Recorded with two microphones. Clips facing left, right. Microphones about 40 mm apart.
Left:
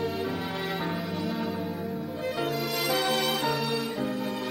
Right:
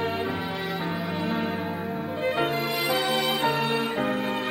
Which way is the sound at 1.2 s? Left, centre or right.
Right.